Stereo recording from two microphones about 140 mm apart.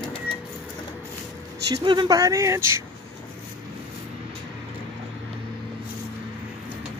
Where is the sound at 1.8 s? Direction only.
30° right (ahead or behind).